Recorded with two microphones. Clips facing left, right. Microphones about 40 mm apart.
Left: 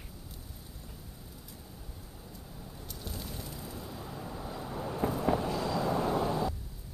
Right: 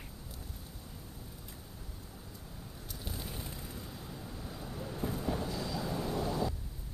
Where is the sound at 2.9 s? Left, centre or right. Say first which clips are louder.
Left 1 dB; centre.